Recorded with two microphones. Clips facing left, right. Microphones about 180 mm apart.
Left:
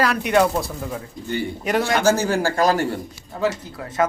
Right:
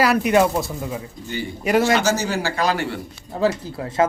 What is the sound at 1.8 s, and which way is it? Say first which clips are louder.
Speech: left 4 dB; 55° left (ahead or behind).